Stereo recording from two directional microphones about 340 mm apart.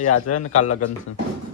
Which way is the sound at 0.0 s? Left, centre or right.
Left.